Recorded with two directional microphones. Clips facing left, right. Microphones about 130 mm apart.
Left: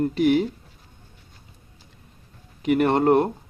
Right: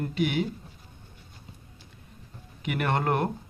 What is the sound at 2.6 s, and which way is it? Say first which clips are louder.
Speech: left 9 dB; 35° left (ahead or behind).